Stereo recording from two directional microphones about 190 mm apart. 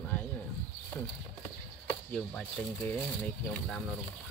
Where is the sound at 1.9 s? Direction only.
5° left (ahead or behind).